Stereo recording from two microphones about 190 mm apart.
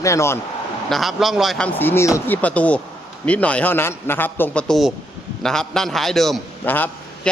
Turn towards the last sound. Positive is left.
turn(degrees=10)  # may be behind; listen again after turning